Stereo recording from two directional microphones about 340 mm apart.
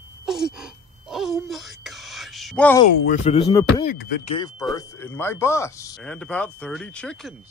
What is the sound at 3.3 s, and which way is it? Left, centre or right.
Speech, centre.